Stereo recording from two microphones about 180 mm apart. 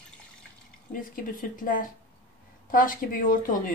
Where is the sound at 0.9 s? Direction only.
50° left (ahead or behind).